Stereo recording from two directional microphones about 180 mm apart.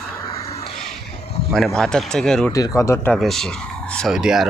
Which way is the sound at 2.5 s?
20° left (ahead or behind).